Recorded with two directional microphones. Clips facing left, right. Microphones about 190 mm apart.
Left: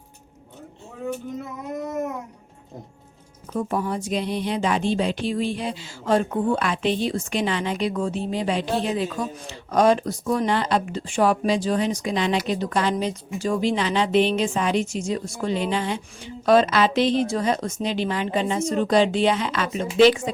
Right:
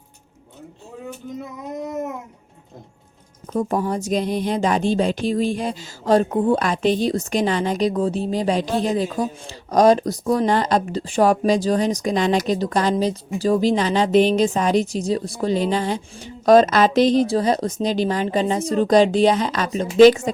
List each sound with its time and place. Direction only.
3.5 s speech: 40° right (ahead or behind)